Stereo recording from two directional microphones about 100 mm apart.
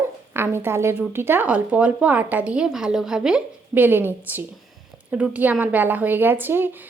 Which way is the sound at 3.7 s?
20° right (ahead or behind).